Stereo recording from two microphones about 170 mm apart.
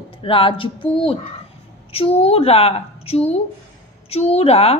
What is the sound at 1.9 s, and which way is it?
Speech, 35° left (ahead or behind).